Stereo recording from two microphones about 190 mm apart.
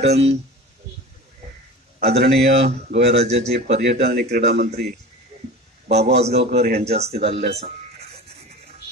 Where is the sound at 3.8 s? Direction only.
60° right (ahead or behind).